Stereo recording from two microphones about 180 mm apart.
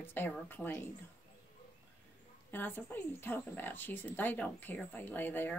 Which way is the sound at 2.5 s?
10° left (ahead or behind).